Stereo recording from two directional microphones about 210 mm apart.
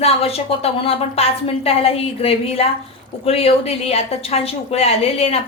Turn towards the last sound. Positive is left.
turn(degrees=30)  # may be behind; listen again after turning